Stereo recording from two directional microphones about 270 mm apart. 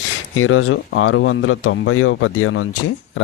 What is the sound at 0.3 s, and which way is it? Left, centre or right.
Speech, left.